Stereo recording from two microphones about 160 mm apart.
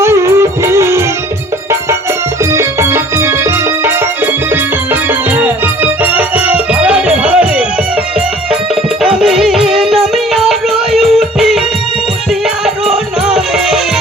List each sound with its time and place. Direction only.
0.0 s music: 15° right (ahead or behind)
2.4 s organ: 15° right (ahead or behind)
4.5 s music: 15° right (ahead or behind)
8.7 s music: 5° right (ahead or behind)